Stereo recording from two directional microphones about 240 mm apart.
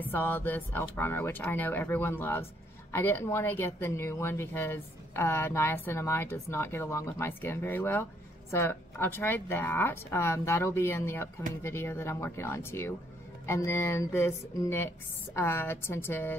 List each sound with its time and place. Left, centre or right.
0.0 s speech: centre